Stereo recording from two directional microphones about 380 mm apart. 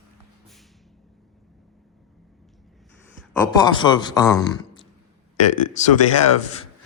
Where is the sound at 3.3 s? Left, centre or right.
Centre.